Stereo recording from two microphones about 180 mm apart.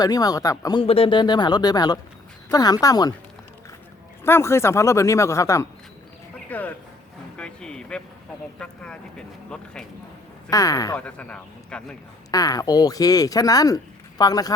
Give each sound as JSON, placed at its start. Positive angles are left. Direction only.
{"t": 0.0, "sound": "speech", "side_deg": 20}
{"t": 4.2, "sound": "a man's voice", "side_deg": 15}
{"t": 10.5, "sound": "speech", "side_deg": 20}
{"t": 10.9, "sound": "a man's voice", "side_deg": 5}
{"t": 12.3, "sound": "speech", "side_deg": 20}